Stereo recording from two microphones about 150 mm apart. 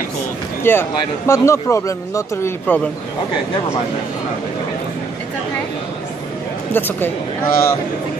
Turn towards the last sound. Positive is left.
turn(degrees=15)  # may be behind; listen again after turning